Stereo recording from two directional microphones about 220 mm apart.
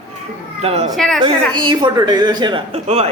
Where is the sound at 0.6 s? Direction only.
25° right (ahead or behind).